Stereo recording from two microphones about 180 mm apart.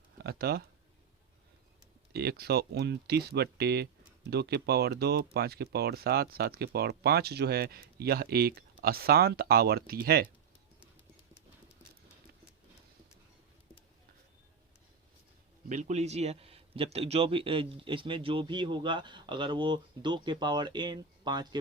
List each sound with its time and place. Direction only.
0.2 s speech: 60° right (ahead or behind)
2.1 s speech: 60° right (ahead or behind)
15.7 s a man's voice: 40° right (ahead or behind); by 21.6 s 25° right (ahead or behind)